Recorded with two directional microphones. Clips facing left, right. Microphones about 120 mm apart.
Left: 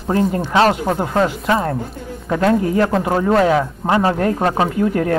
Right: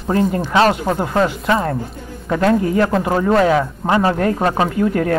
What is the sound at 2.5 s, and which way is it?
Speech, 20° left (ahead or behind).